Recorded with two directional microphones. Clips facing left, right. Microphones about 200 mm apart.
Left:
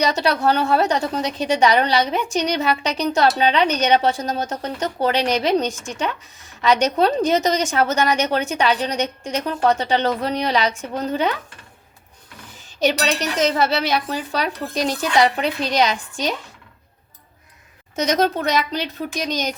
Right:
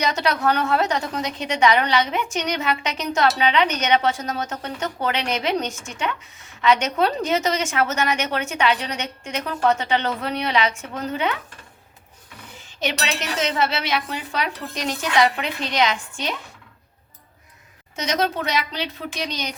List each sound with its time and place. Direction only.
0.0 s speech: 35° left (ahead or behind)
12.8 s speech: 35° left (ahead or behind)
17.9 s speech: 45° left (ahead or behind)